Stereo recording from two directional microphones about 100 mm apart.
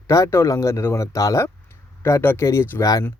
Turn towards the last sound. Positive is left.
turn(degrees=35)  # may be behind; listen again after turning